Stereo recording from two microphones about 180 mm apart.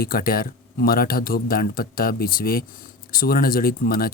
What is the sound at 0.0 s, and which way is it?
Speech, 55° left (ahead or behind).